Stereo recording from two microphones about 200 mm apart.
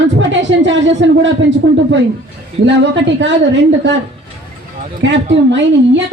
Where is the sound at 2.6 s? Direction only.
65° right (ahead or behind).